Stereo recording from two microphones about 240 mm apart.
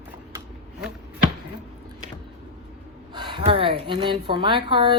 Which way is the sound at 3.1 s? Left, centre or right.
Centre.